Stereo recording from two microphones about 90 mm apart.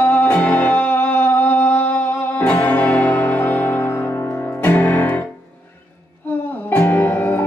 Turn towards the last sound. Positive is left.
turn(degrees=25)  # may be behind; listen again after turning